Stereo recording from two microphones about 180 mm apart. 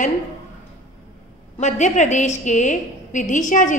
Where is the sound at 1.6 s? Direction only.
40° left (ahead or behind).